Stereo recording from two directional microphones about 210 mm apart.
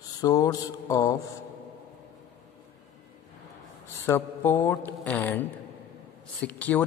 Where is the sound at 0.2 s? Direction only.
15° left (ahead or behind).